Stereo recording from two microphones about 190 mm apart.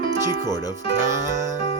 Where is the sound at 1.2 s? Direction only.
15° right (ahead or behind).